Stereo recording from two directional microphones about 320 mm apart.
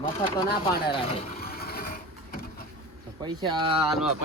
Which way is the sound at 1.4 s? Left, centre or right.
Left.